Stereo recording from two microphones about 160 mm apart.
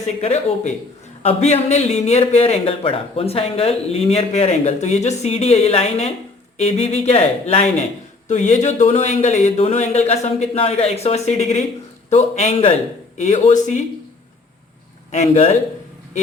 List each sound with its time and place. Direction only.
0.0 s a man's voice: 45° left (ahead or behind)
15.1 s speech: 45° left (ahead or behind)